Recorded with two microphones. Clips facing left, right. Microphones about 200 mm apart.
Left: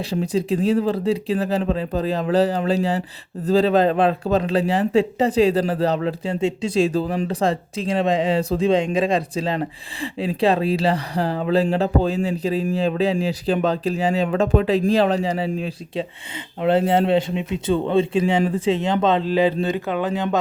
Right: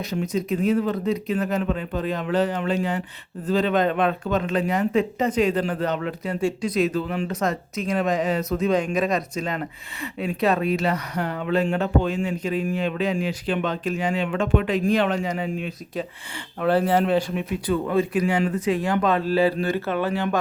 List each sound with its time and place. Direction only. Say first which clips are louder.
0.0 s speech: left 3 dB; 30° left (ahead or behind)
16.6 s speech: left 2 dB; 25° left (ahead or behind)